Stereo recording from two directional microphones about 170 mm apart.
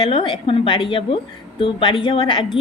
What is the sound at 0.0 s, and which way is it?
A woman's voice, 30° left (ahead or behind).